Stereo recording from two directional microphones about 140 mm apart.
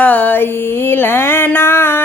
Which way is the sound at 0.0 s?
10° left (ahead or behind).